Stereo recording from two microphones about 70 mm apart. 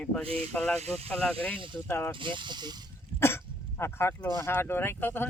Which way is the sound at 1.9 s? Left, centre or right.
Left.